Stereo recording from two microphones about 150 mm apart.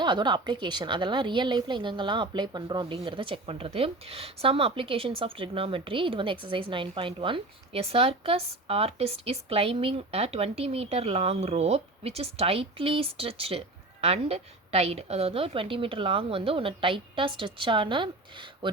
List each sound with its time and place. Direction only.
0.0 s a woman's voice: 30° right (ahead or behind)